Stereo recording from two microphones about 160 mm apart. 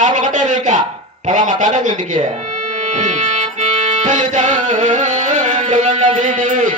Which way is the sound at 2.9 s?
50° right (ahead or behind).